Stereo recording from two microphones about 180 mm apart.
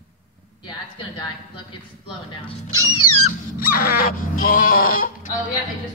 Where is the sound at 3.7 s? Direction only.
55° left (ahead or behind).